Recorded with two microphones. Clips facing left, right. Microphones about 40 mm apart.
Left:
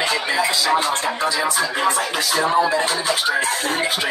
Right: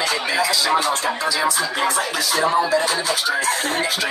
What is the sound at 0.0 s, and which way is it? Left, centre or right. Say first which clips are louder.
Music: left 1 dB; left.